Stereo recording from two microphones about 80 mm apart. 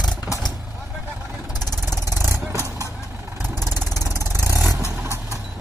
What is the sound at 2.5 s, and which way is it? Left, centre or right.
Vehicle, left.